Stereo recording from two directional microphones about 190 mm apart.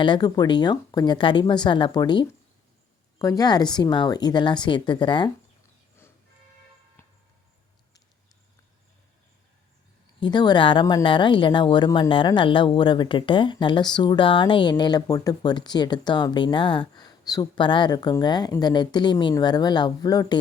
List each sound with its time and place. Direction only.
0.0 s speech: 25° left (ahead or behind)
10.2 s speech: 25° left (ahead or behind)